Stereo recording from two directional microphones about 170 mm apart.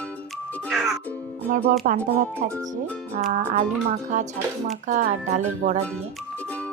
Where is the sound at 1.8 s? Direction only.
50° right (ahead or behind).